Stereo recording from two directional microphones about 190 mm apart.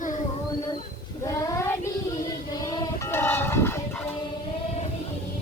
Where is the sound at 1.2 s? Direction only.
15° left (ahead or behind).